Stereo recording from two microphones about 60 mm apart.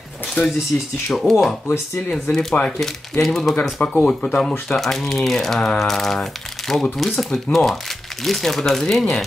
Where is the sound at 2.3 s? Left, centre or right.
Centre.